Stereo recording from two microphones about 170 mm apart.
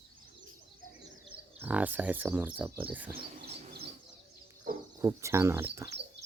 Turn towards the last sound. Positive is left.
turn(degrees=-15)  # may be behind; listen again after turning